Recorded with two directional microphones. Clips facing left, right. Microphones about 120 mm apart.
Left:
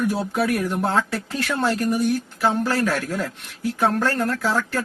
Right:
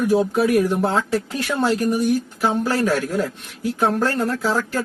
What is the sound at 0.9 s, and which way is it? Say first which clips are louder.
Speech: right 2 dB; 15° right (ahead or behind).